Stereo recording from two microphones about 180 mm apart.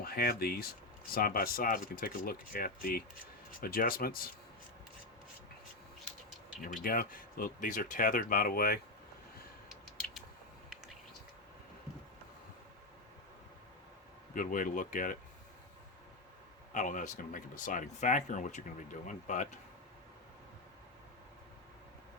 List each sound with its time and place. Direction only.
0.0 s speech: 55° left (ahead or behind)
6.8 s speech: 50° left (ahead or behind)
14.3 s speech: 50° left (ahead or behind)
16.7 s speech: 45° left (ahead or behind)